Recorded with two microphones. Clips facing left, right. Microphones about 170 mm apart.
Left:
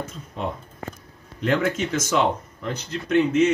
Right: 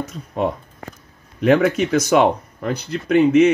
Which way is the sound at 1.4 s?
65° right (ahead or behind).